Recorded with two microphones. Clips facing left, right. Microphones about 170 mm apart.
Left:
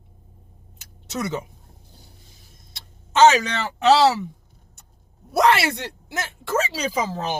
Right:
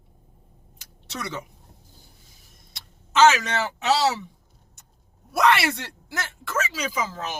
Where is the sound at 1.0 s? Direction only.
20° left (ahead or behind).